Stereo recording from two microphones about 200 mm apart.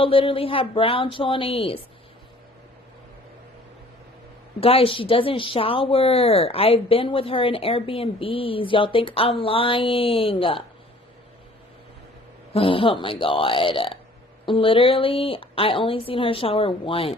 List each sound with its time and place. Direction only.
0.0 s a woman's voice: 25° left (ahead or behind)
4.6 s a woman's voice: 30° left (ahead or behind)
12.5 s a woman's voice: 25° left (ahead or behind)